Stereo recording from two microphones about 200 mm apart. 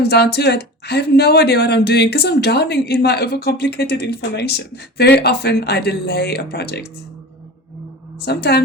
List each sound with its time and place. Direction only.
0.0 s speech: 55° left (ahead or behind)
8.2 s speech: 55° left (ahead or behind)